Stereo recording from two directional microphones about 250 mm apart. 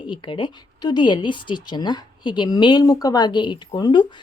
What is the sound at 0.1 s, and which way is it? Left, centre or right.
Speech, centre.